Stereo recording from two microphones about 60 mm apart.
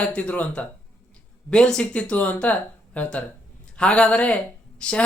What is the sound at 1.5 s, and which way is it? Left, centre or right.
Speech, centre.